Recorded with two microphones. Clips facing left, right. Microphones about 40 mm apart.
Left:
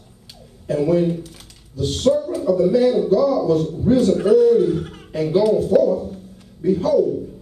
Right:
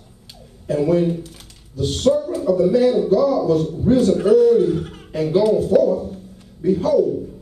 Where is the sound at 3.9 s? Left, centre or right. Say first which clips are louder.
Even; centre.